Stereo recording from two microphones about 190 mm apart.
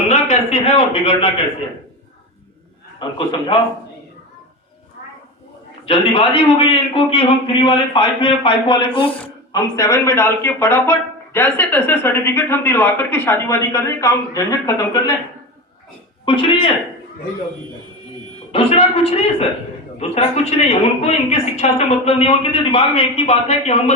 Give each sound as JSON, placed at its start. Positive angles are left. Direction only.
{"t": 0.1, "sound": "a sound", "side_deg": 35}
{"t": 3.0, "sound": "a man's voice", "side_deg": 25}
{"t": 5.8, "sound": "a man's voice", "side_deg": 30}
{"t": 16.2, "sound": "speech", "side_deg": 30}
{"t": 18.5, "sound": "a woman's voice", "side_deg": 30}